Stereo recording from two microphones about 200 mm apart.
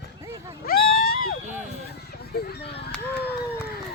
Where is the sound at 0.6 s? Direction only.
50° left (ahead or behind).